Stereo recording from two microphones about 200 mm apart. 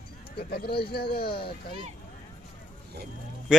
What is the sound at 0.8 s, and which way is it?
Speech, 50° left (ahead or behind).